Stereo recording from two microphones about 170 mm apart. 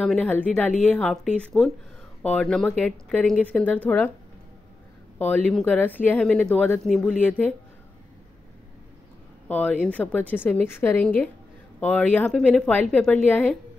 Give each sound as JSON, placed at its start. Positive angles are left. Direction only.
{"t": 0.0, "sound": "a woman's voice", "side_deg": 5}
{"t": 5.2, "sound": "a woman's voice", "side_deg": 5}
{"t": 9.5, "sound": "a woman's voice", "side_deg": 10}